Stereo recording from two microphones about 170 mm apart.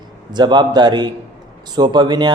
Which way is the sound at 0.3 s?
25° right (ahead or behind).